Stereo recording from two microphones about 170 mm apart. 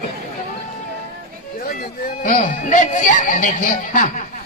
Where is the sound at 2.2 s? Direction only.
50° left (ahead or behind).